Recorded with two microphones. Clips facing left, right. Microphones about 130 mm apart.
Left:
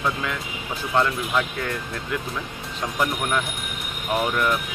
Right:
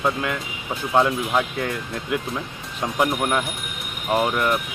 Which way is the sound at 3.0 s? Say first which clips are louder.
Right 3 dB; 15° right (ahead or behind).